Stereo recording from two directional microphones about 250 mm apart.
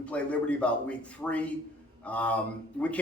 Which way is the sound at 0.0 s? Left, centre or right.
Centre.